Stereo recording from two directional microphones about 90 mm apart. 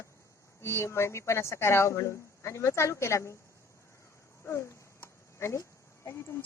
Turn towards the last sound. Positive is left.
turn(degrees=30)  # may be behind; listen again after turning